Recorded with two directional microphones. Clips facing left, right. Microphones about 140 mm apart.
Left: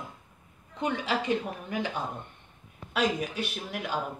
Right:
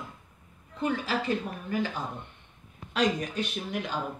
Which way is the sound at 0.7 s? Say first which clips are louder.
Even; 20° left (ahead or behind).